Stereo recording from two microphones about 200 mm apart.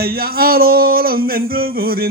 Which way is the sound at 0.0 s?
50° right (ahead or behind).